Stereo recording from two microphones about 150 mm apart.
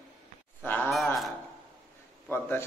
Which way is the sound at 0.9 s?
Centre (ahead or behind).